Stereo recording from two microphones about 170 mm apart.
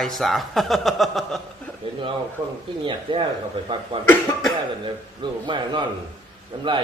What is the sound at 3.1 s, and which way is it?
Speech, 30° right (ahead or behind).